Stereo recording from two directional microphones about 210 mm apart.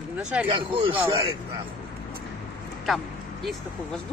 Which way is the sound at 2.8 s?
Centre (ahead or behind).